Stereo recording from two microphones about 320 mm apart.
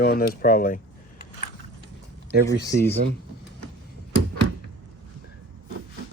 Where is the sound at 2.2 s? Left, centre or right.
Centre.